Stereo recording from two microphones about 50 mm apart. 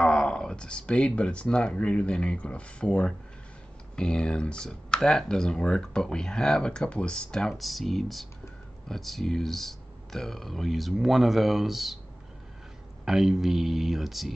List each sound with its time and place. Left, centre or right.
0.0 s speech: centre
13.0 s speech: centre